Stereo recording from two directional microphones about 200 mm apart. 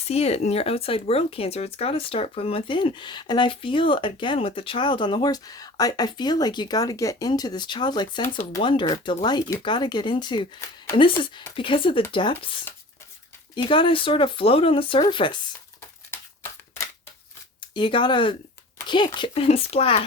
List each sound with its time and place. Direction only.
0.1 s speech: 30° left (ahead or behind)
13.7 s speech: 25° left (ahead or behind)
16.1 s shuffling cards: 15° left (ahead or behind)
17.7 s speech: 25° left (ahead or behind)